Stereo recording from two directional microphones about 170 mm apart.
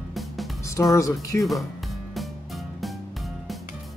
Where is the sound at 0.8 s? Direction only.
15° left (ahead or behind).